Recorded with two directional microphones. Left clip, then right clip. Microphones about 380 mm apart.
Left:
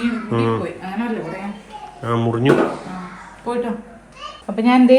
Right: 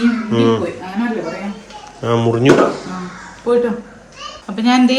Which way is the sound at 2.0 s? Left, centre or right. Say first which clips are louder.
Right 5 dB; centre.